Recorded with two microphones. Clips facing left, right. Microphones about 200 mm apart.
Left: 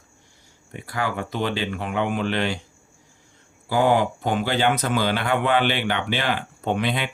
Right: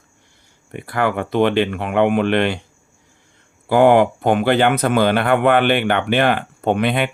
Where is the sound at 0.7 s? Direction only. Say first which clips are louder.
Right 7 dB; 60° right (ahead or behind).